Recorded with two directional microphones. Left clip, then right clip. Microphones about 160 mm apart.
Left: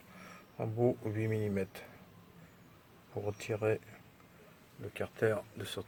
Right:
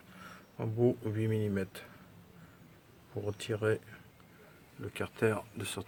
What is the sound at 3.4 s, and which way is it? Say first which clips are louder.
Speech: right 1 dB; 10° right (ahead or behind).